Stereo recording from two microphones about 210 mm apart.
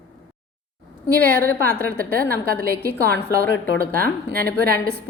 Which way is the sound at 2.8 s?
45° right (ahead or behind).